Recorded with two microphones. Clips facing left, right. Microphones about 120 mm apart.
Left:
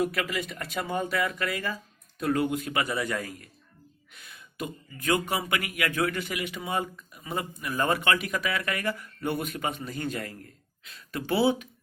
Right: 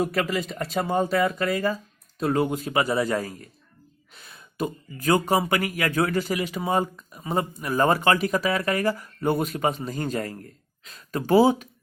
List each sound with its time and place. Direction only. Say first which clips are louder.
0.0 s speech: right 4 dB; 40° right (ahead or behind)